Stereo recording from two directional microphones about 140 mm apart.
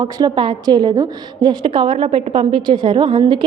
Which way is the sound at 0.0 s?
30° right (ahead or behind).